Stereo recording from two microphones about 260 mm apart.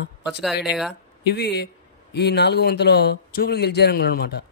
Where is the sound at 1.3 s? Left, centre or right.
Left.